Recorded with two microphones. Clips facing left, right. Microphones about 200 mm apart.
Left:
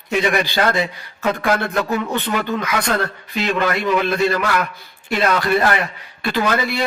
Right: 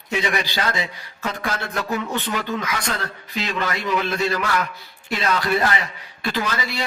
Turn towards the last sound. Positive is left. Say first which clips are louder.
# left 6 dB
turn(degrees=55)  # may be behind; listen again after turning